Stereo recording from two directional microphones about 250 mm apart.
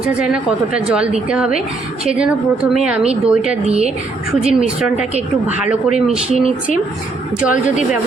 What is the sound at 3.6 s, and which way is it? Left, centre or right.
Speech, right.